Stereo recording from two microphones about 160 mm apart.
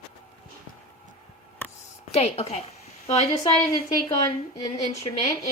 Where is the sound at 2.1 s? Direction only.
45° left (ahead or behind).